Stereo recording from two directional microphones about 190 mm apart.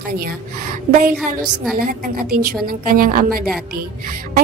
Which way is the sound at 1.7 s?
45° right (ahead or behind).